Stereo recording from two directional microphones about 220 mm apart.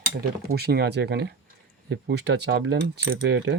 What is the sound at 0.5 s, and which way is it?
Speech, 45° right (ahead or behind).